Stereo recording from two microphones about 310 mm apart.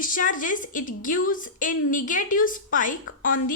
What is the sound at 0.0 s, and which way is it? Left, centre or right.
A woman's voice, left.